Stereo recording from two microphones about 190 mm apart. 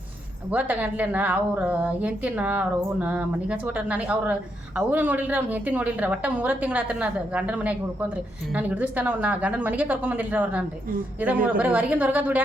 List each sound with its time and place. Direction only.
0.5 s a woman's voice: 10° right (ahead or behind)